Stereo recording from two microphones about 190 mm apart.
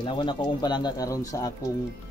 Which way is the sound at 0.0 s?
25° left (ahead or behind).